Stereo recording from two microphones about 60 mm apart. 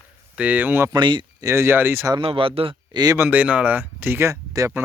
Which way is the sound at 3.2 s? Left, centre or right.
Right.